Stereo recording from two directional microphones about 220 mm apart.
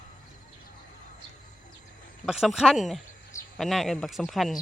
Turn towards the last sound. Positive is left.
turn(degrees=0)  # may be behind; listen again after turning